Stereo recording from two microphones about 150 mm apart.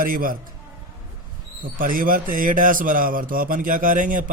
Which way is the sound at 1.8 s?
65° right (ahead or behind).